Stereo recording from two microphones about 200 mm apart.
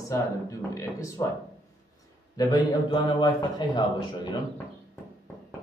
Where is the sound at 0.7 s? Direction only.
15° left (ahead or behind).